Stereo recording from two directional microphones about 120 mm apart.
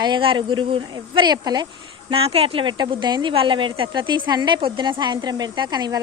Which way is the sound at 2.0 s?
55° right (ahead or behind).